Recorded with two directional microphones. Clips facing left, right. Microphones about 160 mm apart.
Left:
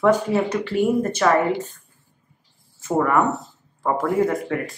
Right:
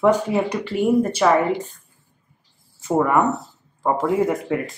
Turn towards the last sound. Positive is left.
turn(degrees=-15)  # may be behind; listen again after turning